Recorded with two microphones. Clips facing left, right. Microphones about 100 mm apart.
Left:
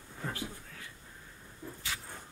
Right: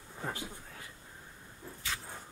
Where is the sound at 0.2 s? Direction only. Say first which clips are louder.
Even; 20° right (ahead or behind).